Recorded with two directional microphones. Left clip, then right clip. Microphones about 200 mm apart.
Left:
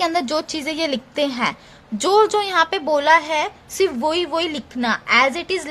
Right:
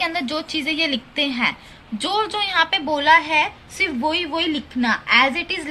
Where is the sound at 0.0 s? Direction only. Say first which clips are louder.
Left 3 dB; 65° left (ahead or behind).